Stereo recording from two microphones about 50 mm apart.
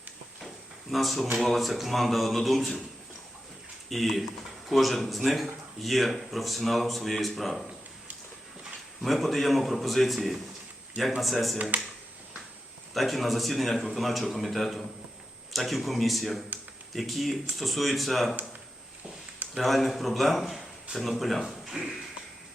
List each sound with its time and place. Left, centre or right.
0.4 s drawer open or close: centre
1.4 s speech: centre
3.8 s speech: centre
9.0 s speech: centre
11.5 s speech: right
12.9 s speech: centre
19.5 s speech: centre